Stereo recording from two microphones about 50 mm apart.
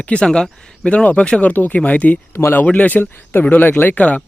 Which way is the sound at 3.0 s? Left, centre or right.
Left.